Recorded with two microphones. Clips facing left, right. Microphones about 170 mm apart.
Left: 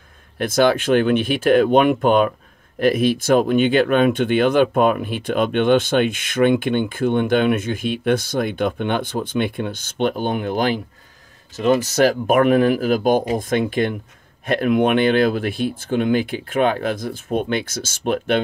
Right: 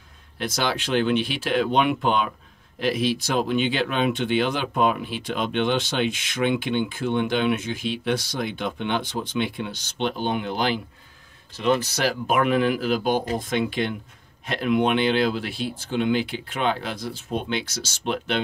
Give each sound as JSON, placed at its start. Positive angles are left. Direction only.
{"t": 0.4, "sound": "speech", "side_deg": 50}